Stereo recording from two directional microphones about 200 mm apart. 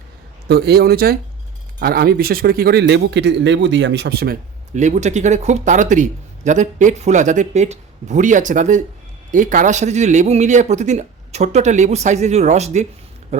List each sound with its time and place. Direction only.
0.4 s a man's voice: 55° right (ahead or behind)
4.7 s speech: 35° right (ahead or behind)